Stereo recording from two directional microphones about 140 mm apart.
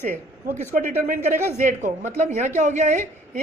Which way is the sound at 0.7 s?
65° right (ahead or behind).